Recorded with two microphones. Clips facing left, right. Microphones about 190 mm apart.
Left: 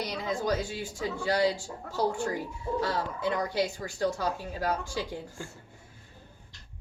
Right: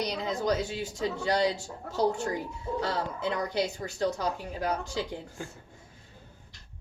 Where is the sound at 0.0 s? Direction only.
20° right (ahead or behind).